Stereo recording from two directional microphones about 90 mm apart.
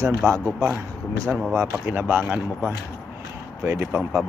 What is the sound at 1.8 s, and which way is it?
Speech, 25° right (ahead or behind).